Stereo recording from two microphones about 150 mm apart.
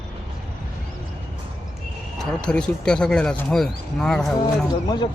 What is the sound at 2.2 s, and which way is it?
Speech, 5° left (ahead or behind).